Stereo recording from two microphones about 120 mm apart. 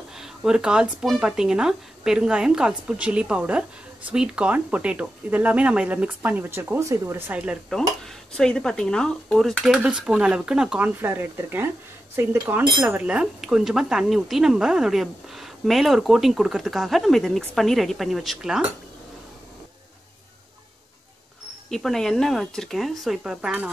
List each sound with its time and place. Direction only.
0.1 s speech: 5° right (ahead or behind)
7.7 s speech: 5° left (ahead or behind)
11.0 s speech: 20° right (ahead or behind)
21.6 s speech: 5° left (ahead or behind)